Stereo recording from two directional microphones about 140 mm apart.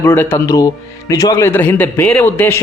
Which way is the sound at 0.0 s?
15° left (ahead or behind).